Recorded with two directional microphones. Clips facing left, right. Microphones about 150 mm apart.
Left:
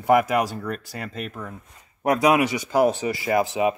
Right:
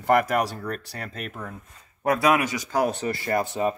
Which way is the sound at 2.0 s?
15° left (ahead or behind).